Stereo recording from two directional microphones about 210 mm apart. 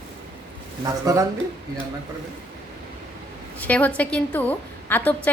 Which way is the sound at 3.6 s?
5° left (ahead or behind).